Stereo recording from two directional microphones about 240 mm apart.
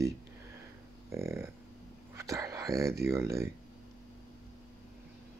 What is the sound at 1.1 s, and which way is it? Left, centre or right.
Speech, centre.